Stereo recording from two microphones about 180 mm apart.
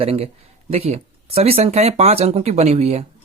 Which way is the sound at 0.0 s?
35° right (ahead or behind).